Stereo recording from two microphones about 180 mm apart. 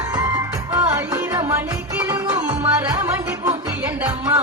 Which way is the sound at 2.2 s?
25° right (ahead or behind).